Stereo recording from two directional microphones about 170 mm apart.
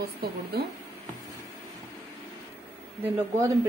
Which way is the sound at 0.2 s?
65° right (ahead or behind).